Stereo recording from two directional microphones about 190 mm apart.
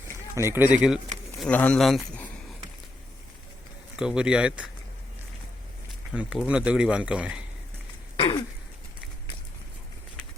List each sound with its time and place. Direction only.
0.4 s speech: 10° right (ahead or behind)
1.4 s a man's voice: 5° left (ahead or behind)
3.9 s speech: 5° right (ahead or behind)
6.1 s speech: 5° right (ahead or behind)
8.1 s throat clearing: 25° left (ahead or behind)